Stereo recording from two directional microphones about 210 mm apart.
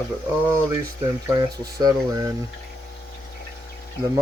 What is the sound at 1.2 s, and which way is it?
Speech, 20° right (ahead or behind).